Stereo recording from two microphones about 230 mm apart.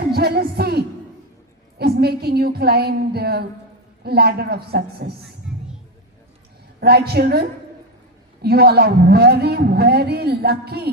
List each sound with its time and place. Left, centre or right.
0.1 s a man's voice: right
5.5 s a sound: centre
6.7 s a man's voice: right